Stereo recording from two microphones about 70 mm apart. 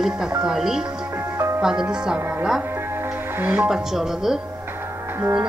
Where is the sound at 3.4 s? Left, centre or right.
Right.